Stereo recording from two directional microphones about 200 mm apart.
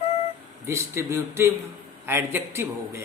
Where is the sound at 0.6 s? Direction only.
15° right (ahead or behind).